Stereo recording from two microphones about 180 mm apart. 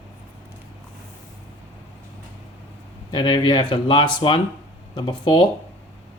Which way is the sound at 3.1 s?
25° left (ahead or behind).